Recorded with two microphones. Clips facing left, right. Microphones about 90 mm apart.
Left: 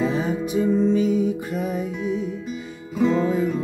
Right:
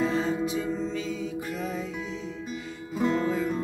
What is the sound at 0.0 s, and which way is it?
Music, 60° left (ahead or behind).